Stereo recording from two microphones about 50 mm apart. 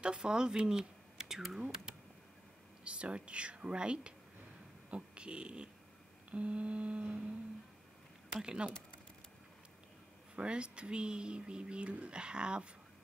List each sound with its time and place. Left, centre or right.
0.0 s speech: centre
2.8 s speech: right
8.4 s speech: centre
10.3 s speech: right